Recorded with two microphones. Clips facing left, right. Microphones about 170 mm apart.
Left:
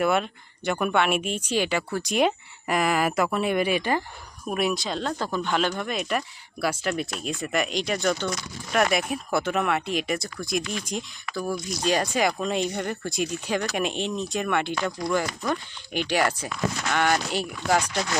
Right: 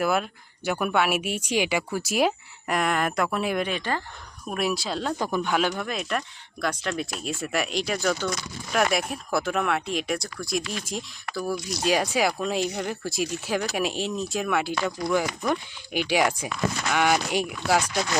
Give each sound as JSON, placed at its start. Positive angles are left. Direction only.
{"t": 0.0, "sound": "speech", "side_deg": 0}
{"t": 4.4, "sound": "speech", "side_deg": 0}